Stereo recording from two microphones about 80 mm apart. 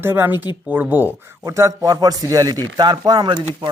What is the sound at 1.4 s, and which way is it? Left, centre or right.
A man's voice, right.